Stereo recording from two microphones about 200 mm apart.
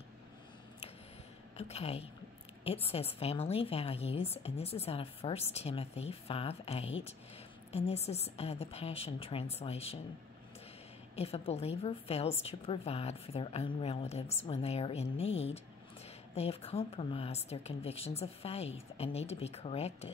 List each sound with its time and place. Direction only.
1.6 s a woman's voice: 30° left (ahead or behind)
11.1 s speech: 30° left (ahead or behind)
16.3 s speech: 30° left (ahead or behind)